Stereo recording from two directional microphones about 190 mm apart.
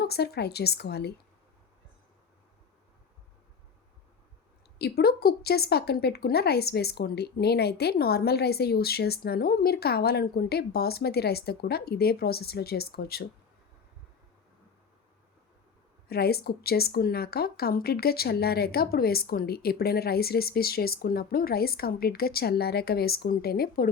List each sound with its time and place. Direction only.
0.0 s a woman's voice: 60° left (ahead or behind)
4.8 s a woman's voice: 55° left (ahead or behind)
16.0 s speech: 55° left (ahead or behind)